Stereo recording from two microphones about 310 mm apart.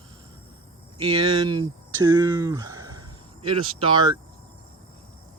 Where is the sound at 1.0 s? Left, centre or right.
Centre.